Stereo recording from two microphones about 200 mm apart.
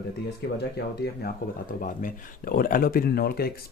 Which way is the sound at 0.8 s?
55° left (ahead or behind).